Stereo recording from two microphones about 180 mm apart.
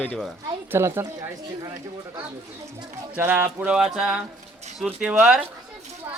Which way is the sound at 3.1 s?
10° right (ahead or behind).